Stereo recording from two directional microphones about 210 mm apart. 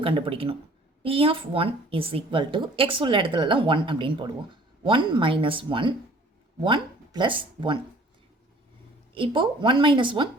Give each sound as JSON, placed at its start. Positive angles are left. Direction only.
{"t": 0.0, "sound": "a woman's voice", "side_deg": -25}
{"t": 9.1, "sound": "a woman's voice", "side_deg": -25}